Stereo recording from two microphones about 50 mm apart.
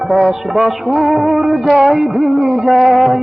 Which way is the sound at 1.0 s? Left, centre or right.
Centre.